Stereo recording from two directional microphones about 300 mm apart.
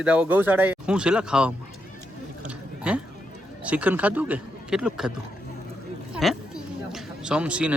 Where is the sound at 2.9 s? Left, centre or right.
Centre.